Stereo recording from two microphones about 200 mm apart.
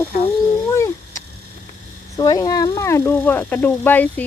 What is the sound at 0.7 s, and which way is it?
Cat, 15° left (ahead or behind).